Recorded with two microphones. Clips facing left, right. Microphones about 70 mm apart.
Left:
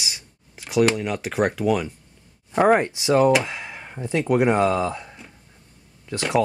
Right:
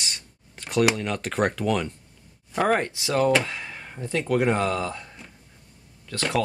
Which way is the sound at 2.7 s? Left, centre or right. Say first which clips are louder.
Left 5 dB; centre.